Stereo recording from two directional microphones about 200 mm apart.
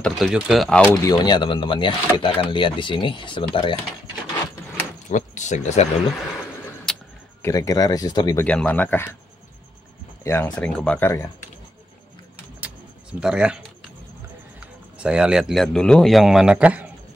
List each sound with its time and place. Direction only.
0.0 s speech: centre (ahead or behind)
0.8 s speech: 20° left (ahead or behind)
5.1 s speech: 35° left (ahead or behind)
6.9 s a sound: centre (ahead or behind)
7.4 s speech: 15° left (ahead or behind)
8.5 s speech: 5° left (ahead or behind)
10.2 s speech: 15° left (ahead or behind)
13.2 s speech: 5° right (ahead or behind)
14.6 s speech: 5° right (ahead or behind)